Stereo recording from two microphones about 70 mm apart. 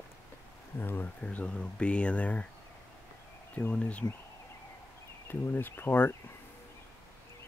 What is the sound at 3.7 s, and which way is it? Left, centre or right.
Speech, centre.